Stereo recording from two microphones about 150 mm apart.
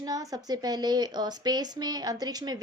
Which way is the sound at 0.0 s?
25° right (ahead or behind).